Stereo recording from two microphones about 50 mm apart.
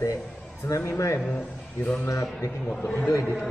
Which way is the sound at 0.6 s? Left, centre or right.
Left.